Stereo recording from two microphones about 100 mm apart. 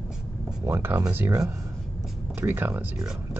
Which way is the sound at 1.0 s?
20° right (ahead or behind).